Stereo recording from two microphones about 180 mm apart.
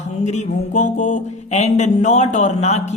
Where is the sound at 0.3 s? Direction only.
40° left (ahead or behind).